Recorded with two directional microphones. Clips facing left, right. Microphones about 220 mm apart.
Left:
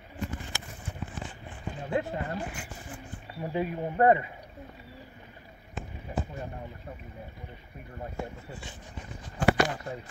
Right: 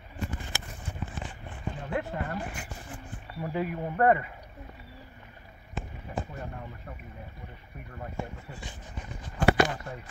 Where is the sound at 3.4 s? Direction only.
20° left (ahead or behind).